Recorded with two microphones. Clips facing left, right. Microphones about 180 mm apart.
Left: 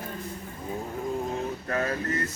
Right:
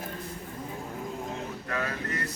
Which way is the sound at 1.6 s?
35° left (ahead or behind).